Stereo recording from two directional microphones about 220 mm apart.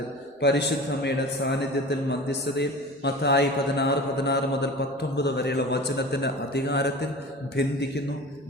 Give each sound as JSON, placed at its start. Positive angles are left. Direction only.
{"t": 0.4, "sound": "mantra", "side_deg": 50}